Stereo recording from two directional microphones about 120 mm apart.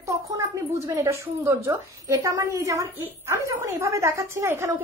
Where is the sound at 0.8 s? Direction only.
25° right (ahead or behind).